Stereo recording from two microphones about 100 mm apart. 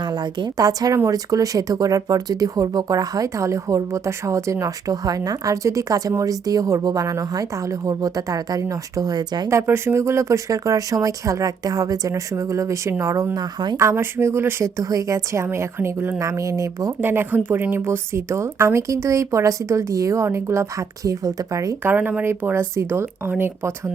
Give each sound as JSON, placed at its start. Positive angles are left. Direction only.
{"t": 0.0, "sound": "a woman's voice", "side_deg": -45}
{"t": 9.5, "sound": "speech", "side_deg": -25}
{"t": 13.3, "sound": "speech", "side_deg": -45}
{"t": 13.7, "sound": "speech", "side_deg": -25}
{"t": 17.0, "sound": "speech", "side_deg": -20}
{"t": 21.8, "sound": "speech", "side_deg": -15}